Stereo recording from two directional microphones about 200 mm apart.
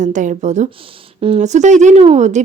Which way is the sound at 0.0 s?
40° right (ahead or behind).